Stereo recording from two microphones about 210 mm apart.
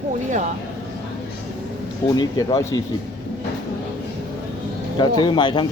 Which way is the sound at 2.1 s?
15° left (ahead or behind).